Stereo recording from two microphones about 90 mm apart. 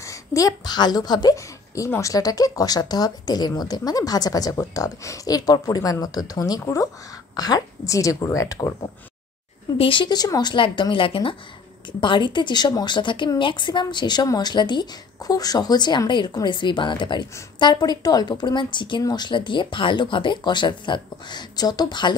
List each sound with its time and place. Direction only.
0.0 s a woman's voice: 35° left (ahead or behind)
1.9 s a woman's voice: 35° left (ahead or behind)
9.8 s a woman's voice: 70° left (ahead or behind)
10.1 s speech: 45° left (ahead or behind)
10.5 s a woman's voice: 65° left (ahead or behind)
12.0 s speech: 65° left (ahead or behind)